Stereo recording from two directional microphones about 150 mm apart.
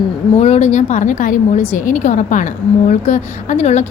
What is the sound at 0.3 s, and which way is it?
A woman's voice, 50° left (ahead or behind).